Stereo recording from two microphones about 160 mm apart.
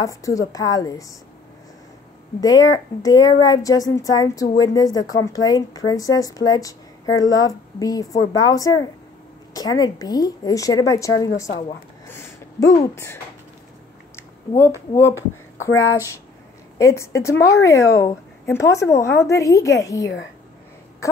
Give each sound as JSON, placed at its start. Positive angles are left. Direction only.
{"t": 0.0, "sound": "a woman's voice", "side_deg": 20}
{"t": 2.4, "sound": "a woman's voice", "side_deg": 20}
{"t": 12.1, "sound": "a sound", "side_deg": 20}
{"t": 12.8, "sound": "speech", "side_deg": 15}
{"t": 15.6, "sound": "a woman's voice", "side_deg": 20}
{"t": 21.0, "sound": "a sound", "side_deg": 20}